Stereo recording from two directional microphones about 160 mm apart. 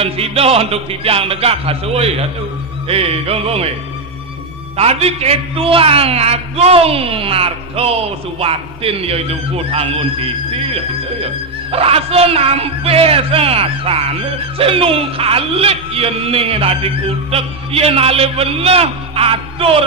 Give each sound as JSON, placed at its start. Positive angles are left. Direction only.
{"t": 0.0, "sound": "speech", "side_deg": -40}
{"t": 4.7, "sound": "speech", "side_deg": -40}